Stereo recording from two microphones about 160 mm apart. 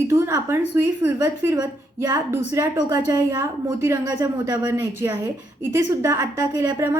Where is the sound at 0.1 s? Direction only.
20° right (ahead or behind).